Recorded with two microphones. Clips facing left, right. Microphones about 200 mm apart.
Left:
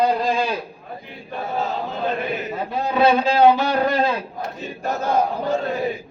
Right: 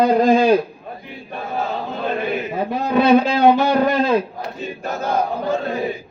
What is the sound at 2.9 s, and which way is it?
A man's voice, 55° right (ahead or behind).